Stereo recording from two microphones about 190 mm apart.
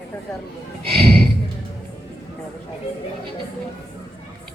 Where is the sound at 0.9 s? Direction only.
30° right (ahead or behind).